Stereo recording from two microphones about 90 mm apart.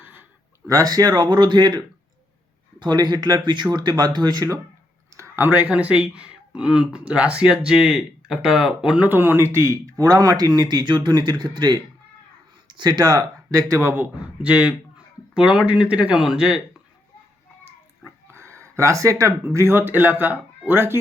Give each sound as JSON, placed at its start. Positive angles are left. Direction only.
{"t": 0.0, "sound": "a sound", "side_deg": -20}
{"t": 0.7, "sound": "speech", "side_deg": -40}
{"t": 5.1, "sound": "clicking", "side_deg": -30}
{"t": 5.6, "sound": "speech", "side_deg": -15}
{"t": 9.0, "sound": "speech", "side_deg": -25}
{"t": 18.3, "sound": "a sound", "side_deg": -30}
{"t": 19.5, "sound": "a man's voice", "side_deg": -25}